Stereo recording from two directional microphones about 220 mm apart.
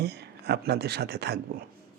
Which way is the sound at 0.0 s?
50° right (ahead or behind).